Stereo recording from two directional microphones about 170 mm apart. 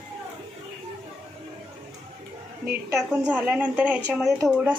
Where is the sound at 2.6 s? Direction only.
5° right (ahead or behind).